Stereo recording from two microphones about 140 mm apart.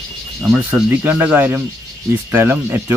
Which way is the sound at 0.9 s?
10° right (ahead or behind).